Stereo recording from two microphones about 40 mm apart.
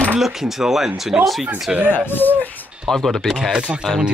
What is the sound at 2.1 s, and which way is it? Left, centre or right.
Speech, left.